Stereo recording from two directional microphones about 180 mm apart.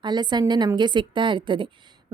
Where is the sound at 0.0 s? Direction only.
25° right (ahead or behind).